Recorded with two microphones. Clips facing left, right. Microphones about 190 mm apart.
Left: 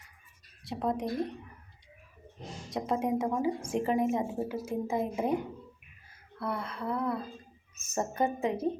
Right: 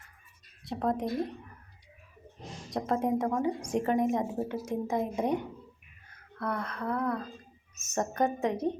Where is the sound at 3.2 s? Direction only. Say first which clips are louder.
Right 1 dB; 10° left (ahead or behind).